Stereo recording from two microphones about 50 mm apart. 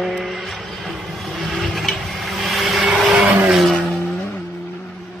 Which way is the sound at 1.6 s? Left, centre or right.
Centre.